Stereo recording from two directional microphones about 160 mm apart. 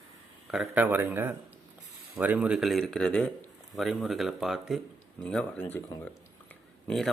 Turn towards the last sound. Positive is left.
turn(degrees=5)  # may be behind; listen again after turning